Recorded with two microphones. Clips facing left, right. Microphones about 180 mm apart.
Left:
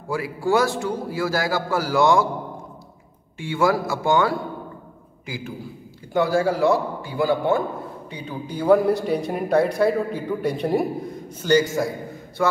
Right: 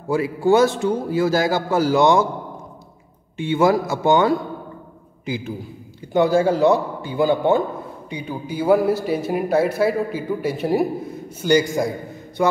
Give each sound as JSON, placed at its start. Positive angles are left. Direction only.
{"t": 0.1, "sound": "a man's voice", "side_deg": -20}
{"t": 3.3, "sound": "a man's voice", "side_deg": -20}